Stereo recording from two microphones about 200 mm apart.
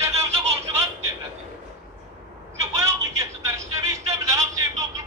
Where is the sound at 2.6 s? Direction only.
15° right (ahead or behind).